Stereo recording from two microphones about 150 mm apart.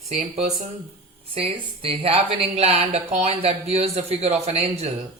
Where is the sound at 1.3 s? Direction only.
40° right (ahead or behind).